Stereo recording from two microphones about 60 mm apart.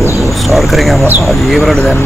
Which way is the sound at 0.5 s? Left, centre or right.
Centre.